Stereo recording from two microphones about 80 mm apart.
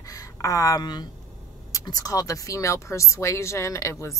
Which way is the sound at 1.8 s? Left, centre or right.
Left.